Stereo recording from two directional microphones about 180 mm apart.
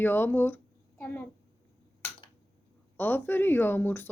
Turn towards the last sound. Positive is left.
turn(degrees=10)  # may be behind; listen again after turning